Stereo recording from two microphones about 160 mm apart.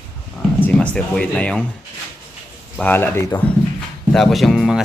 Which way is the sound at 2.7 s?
10° left (ahead or behind).